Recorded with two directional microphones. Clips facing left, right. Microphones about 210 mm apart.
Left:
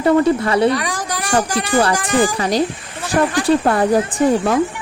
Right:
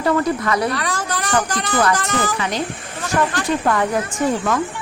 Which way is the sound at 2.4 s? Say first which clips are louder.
Left 6 dB; 35° left (ahead or behind).